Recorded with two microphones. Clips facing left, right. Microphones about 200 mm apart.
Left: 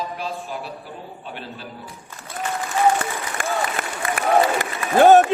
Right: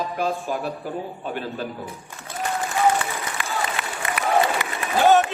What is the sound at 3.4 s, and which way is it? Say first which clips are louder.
Applause: left 5 dB; 45° left (ahead or behind).